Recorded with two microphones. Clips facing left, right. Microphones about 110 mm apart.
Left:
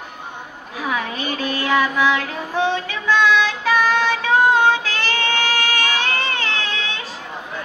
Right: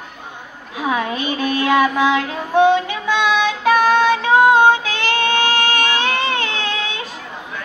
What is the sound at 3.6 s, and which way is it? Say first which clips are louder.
Child singing: right 4 dB; 50° right (ahead or behind).